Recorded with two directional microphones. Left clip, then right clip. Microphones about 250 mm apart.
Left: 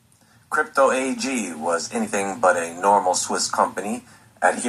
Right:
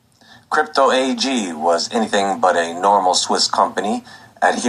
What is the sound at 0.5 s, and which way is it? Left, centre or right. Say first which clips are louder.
Speech: right 4 dB; right.